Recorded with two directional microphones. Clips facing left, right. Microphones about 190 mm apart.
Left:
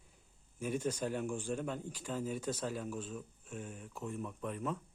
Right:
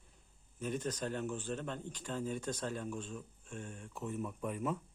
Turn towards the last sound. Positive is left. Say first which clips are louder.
# right 2 dB
turn(degrees=-10)  # may be behind; listen again after turning